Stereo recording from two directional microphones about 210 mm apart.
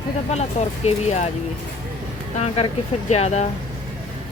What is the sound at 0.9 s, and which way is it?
Speech, 30° left (ahead or behind).